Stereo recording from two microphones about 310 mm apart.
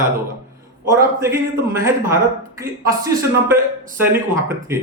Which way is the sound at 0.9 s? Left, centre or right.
Centre.